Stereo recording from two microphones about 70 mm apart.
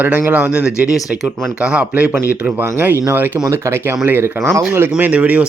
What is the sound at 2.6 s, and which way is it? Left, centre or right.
Speech, right.